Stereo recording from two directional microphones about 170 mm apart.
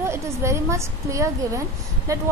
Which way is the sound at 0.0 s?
15° right (ahead or behind).